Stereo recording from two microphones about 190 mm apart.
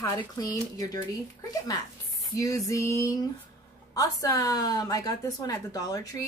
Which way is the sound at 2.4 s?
15° left (ahead or behind).